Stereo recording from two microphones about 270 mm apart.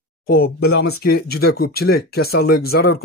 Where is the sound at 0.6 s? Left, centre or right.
Left.